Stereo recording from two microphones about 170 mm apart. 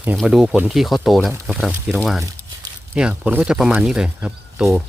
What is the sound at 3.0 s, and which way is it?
Speech, 5° right (ahead or behind).